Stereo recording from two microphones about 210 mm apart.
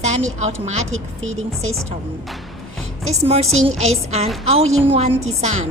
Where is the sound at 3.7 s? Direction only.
75° right (ahead or behind).